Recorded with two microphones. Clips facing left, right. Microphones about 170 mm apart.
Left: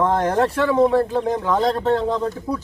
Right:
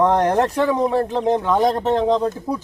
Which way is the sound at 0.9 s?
20° right (ahead or behind).